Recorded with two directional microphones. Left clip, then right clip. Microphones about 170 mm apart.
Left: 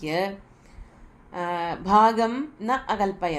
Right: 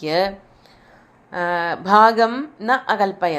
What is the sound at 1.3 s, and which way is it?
A woman's voice, 20° right (ahead or behind).